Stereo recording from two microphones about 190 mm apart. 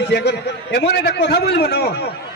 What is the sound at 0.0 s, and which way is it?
A man's voice, 60° left (ahead or behind).